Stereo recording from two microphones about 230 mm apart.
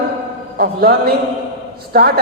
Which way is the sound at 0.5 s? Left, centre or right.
Right.